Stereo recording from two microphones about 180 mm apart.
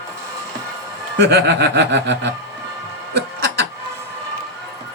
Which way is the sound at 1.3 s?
65° right (ahead or behind).